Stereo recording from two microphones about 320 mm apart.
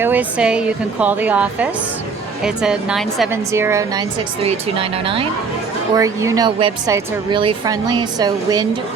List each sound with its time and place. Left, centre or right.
0.0 s a woman's voice: centre